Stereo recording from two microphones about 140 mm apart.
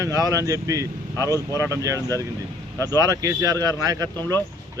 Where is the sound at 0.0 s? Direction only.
25° right (ahead or behind).